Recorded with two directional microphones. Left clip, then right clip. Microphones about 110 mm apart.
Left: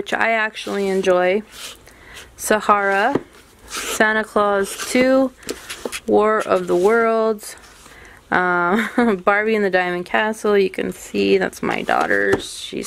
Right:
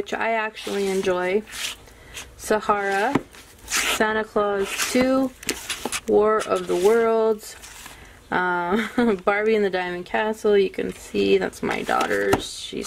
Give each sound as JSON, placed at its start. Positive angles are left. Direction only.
{"t": 0.0, "sound": "speech", "side_deg": 50}
{"t": 1.5, "sound": "a sound", "side_deg": -5}
{"t": 2.4, "sound": "speech", "side_deg": 50}
{"t": 3.7, "sound": "speech", "side_deg": -10}
{"t": 4.0, "sound": "speech", "side_deg": 50}
{"t": 5.5, "sound": "a sound", "side_deg": -10}
{"t": 6.1, "sound": "speech", "side_deg": 45}